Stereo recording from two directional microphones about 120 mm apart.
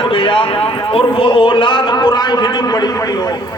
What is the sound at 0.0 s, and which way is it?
A man's voice, 45° left (ahead or behind).